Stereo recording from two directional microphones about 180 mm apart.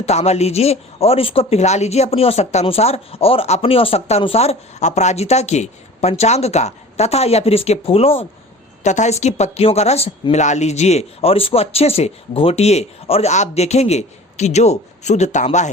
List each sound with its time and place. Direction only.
0.0 s speech: 35° left (ahead or behind)